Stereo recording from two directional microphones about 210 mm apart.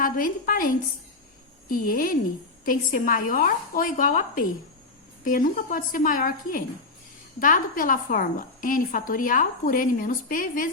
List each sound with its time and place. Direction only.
0.0 s a woman's voice: 40° left (ahead or behind)